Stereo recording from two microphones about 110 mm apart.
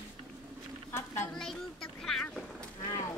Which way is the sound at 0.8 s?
25° left (ahead or behind).